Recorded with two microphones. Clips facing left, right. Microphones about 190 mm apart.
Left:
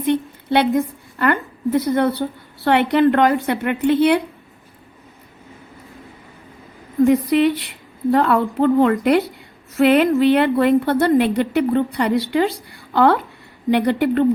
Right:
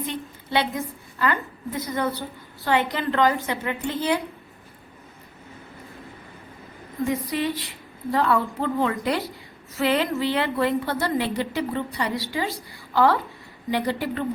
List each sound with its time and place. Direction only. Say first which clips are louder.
0.0 s a woman's voice: left 12 dB; 60° left (ahead or behind)
7.0 s a woman's voice: left 11 dB; 70° left (ahead or behind)